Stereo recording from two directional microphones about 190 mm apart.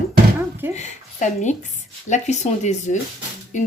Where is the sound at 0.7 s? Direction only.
40° left (ahead or behind).